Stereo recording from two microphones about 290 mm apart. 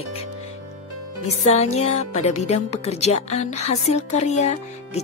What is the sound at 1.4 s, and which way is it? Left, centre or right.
A woman's voice, left.